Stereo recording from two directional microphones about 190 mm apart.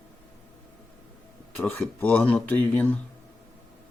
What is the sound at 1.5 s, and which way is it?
Speech, 10° left (ahead or behind).